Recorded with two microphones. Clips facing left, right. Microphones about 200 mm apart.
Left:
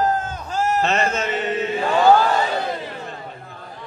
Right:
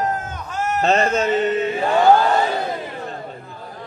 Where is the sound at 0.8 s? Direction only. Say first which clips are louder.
Right 4 dB; 35° right (ahead or behind).